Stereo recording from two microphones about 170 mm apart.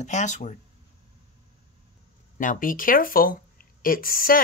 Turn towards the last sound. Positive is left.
turn(degrees=55)  # may be behind; listen again after turning